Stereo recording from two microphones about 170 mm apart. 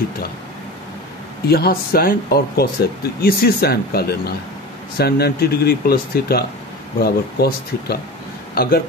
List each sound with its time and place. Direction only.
1.5 s speech: 65° left (ahead or behind)